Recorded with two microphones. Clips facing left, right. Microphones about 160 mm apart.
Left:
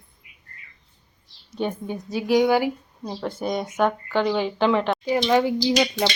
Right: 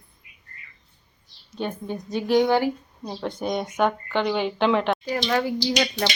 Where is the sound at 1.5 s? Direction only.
10° left (ahead or behind).